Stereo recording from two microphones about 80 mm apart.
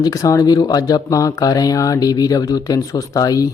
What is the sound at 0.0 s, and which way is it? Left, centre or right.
Speech, left.